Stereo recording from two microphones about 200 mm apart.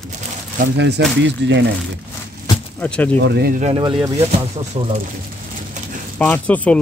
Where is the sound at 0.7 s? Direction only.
60° right (ahead or behind).